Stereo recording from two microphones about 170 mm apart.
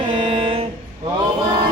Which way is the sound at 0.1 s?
30° right (ahead or behind).